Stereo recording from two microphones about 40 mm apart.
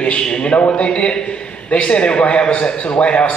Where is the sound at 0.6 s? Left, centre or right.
Left.